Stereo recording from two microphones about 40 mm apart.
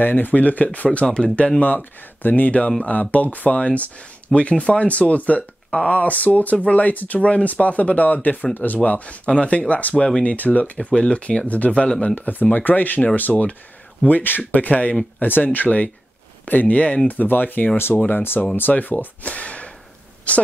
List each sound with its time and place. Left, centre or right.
0.0 s speech: left
1.0 s speech: left
1.6 s speech: left
9.9 s speech: left
10.2 s speech: left
10.8 s speech: left
15.1 s speech: left
17.1 s a woman's voice: left